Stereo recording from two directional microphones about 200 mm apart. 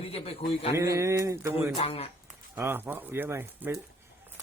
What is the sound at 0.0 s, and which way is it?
Speech, 30° left (ahead or behind).